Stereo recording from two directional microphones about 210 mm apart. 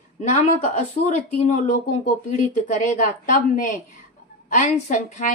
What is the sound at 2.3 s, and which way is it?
A woman's voice, 40° left (ahead or behind).